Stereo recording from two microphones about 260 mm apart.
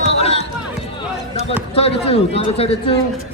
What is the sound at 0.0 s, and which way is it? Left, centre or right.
Run, left.